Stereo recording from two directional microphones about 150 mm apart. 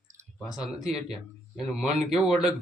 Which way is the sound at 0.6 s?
Centre (ahead or behind).